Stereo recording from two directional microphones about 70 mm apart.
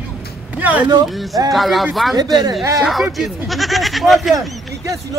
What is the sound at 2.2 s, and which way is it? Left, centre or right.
Speech, right.